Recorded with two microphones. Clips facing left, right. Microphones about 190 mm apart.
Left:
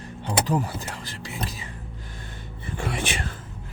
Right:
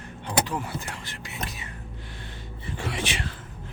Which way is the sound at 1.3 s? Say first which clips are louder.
Left 3 dB; 30° left (ahead or behind).